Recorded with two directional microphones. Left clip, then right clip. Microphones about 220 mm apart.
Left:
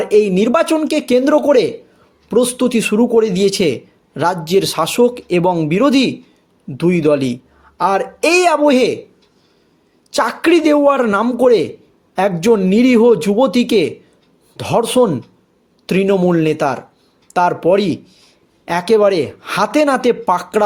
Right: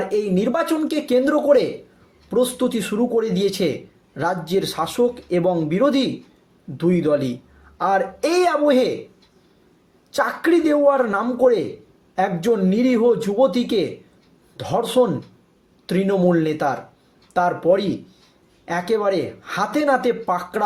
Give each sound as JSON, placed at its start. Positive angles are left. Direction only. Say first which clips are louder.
{"t": 0.1, "sound": "a man's voice", "louder": "left 12 dB", "side_deg": 40}
{"t": 10.1, "sound": "a man's voice", "louder": "left 5 dB", "side_deg": 40}